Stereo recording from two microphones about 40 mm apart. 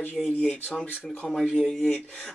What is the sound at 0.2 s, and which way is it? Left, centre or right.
Speech, centre.